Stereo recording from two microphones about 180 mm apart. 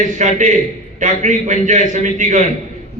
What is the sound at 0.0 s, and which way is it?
A man's voice, 45° right (ahead or behind).